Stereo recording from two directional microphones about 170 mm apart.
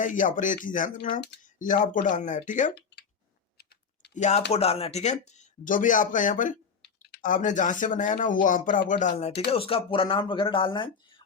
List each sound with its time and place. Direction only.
0.0 s speech: 50° left (ahead or behind)
4.1 s speech: 45° left (ahead or behind)
6.8 s typing: 75° left (ahead or behind)
7.2 s speech: 50° left (ahead or behind); by 10.9 s 30° left (ahead or behind)